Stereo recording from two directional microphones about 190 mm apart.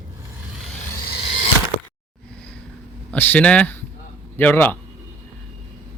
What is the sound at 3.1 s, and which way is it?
A man's voice, 10° left (ahead or behind).